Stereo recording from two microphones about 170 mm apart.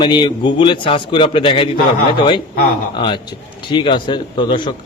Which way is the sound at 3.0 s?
30° left (ahead or behind).